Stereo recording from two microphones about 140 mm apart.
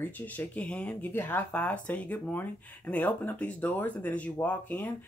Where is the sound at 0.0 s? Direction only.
10° left (ahead or behind).